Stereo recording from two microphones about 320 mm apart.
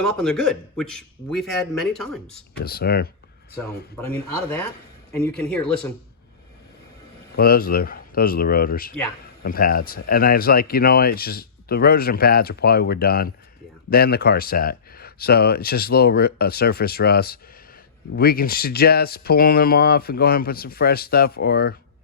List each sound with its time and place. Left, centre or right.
0.2 s a man's voice: centre
2.6 s speech: left
4.0 s a man's voice: centre
5.1 s a man's voice: centre
7.3 s speech: left